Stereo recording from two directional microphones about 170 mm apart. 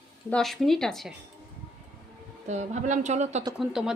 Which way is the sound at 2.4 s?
45° right (ahead or behind).